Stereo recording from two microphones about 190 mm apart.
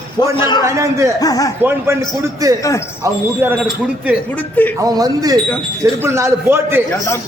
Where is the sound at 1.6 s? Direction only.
10° right (ahead or behind).